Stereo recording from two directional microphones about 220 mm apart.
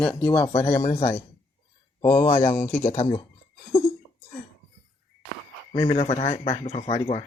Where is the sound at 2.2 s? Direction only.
30° left (ahead or behind).